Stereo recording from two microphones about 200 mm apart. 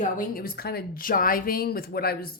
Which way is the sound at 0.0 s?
45° left (ahead or behind).